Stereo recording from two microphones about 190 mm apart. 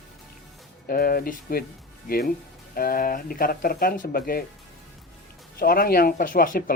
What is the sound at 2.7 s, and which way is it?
Speech, 50° left (ahead or behind).